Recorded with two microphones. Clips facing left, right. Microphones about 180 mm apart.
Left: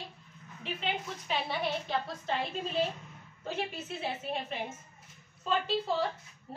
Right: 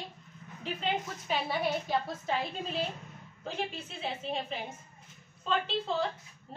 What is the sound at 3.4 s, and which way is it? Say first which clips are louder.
A woman's voice: left 1 dB; 5° left (ahead or behind).